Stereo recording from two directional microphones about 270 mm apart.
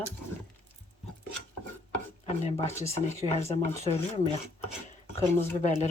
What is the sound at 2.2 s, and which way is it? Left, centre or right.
Speech, left.